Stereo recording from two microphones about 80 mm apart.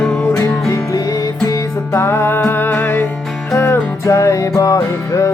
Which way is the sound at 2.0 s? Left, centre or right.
Left.